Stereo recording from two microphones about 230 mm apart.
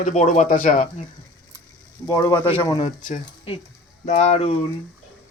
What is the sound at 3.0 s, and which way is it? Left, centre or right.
Speech, left.